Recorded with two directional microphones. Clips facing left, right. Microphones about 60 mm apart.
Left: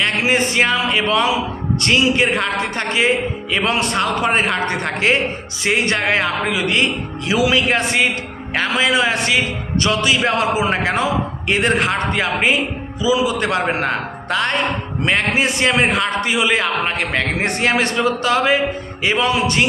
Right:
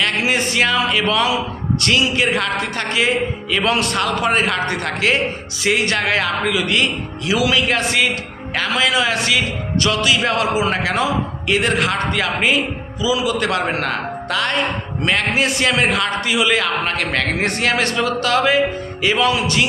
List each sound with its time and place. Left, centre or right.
0.0 s a man's voice: left